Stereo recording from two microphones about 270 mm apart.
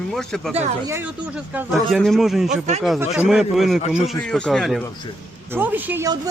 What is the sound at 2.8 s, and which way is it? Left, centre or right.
A man's voice, centre.